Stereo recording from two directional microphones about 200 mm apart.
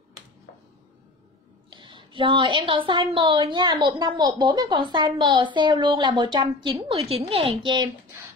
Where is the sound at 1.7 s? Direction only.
25° right (ahead or behind).